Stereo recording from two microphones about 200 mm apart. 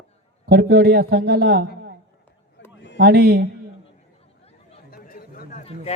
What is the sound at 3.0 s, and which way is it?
Speech, 55° right (ahead or behind).